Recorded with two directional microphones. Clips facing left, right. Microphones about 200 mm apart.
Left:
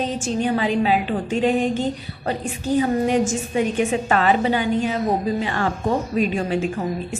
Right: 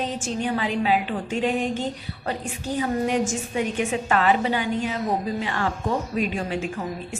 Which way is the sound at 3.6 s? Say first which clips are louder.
Left 5 dB; 30° left (ahead or behind).